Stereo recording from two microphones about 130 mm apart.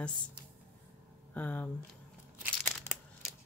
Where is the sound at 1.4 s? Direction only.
15° left (ahead or behind).